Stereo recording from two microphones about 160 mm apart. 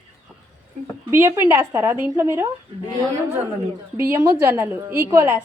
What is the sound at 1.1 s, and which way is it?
A woman's voice, 15° right (ahead or behind).